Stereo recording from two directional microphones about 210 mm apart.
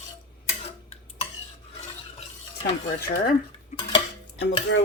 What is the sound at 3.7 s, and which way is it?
Cutlery, 35° left (ahead or behind).